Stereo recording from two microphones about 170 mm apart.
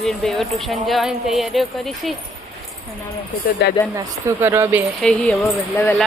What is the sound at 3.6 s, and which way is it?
Speech, 90° left.